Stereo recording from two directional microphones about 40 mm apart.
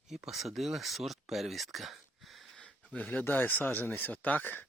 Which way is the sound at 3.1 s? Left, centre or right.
Left.